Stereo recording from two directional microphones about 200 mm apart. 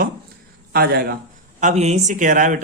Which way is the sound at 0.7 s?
50° right (ahead or behind).